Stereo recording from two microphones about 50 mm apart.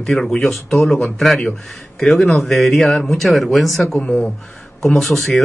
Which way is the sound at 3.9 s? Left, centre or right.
Centre.